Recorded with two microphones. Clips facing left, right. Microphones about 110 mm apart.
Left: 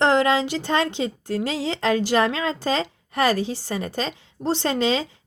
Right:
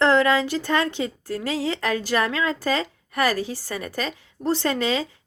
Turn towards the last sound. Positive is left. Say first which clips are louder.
# left 2 dB
turn(degrees=25)  # may be behind; listen again after turning